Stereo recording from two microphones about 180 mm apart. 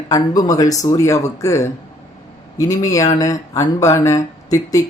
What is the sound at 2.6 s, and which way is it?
Speech, 20° left (ahead or behind).